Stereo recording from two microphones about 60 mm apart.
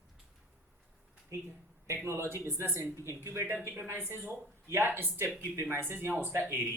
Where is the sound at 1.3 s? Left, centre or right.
Right.